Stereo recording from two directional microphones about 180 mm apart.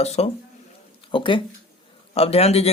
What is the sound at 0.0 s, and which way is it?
Speech, 35° left (ahead or behind).